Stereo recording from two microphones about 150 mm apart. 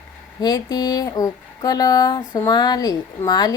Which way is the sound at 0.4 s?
25° left (ahead or behind).